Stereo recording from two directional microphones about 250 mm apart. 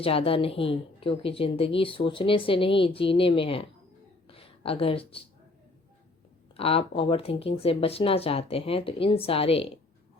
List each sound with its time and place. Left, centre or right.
0.0 s speech: left
4.3 s a sound: left
6.6 s speech: left